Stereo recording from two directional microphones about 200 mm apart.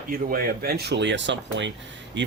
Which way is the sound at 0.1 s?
45° right (ahead or behind).